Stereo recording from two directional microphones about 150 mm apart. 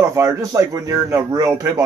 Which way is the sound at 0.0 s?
20° right (ahead or behind).